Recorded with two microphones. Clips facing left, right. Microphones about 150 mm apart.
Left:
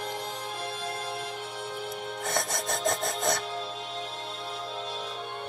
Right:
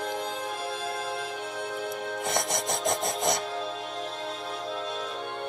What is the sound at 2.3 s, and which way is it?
Music, 15° right (ahead or behind).